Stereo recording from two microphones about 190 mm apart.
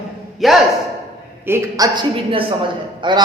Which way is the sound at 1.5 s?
20° right (ahead or behind).